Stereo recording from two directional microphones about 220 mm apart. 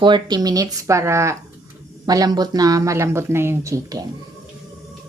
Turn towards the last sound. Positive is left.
turn(degrees=-15)  # may be behind; listen again after turning